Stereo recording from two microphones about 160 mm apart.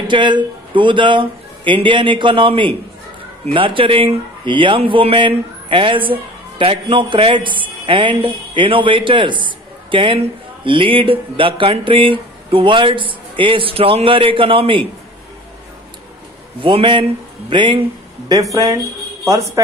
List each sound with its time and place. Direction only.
0.1 s a man's voice: 30° right (ahead or behind)
16.6 s a man's voice: 30° right (ahead or behind)
18.3 s speech: 20° right (ahead or behind)